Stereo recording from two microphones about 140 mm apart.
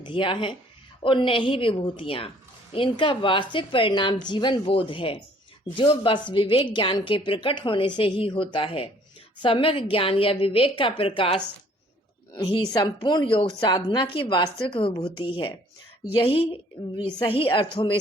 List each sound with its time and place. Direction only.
0.0 s a woman's voice: 35° left (ahead or behind)
12.3 s a woman's voice: 30° left (ahead or behind)